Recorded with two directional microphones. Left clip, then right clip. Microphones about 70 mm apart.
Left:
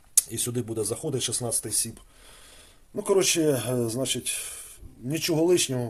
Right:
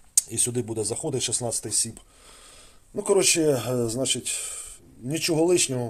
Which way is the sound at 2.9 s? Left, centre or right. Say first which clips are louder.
Right 2 dB; centre.